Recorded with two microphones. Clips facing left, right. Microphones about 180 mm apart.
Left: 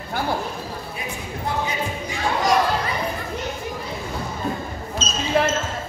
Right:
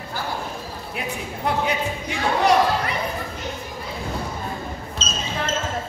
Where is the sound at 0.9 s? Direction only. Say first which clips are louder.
Right 1 dB; 70° right (ahead or behind).